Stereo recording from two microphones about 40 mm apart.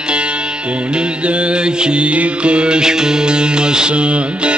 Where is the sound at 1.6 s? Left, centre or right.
Right.